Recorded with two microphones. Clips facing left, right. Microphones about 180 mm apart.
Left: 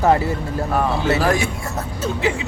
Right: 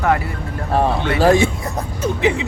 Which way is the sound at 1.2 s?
25° right (ahead or behind).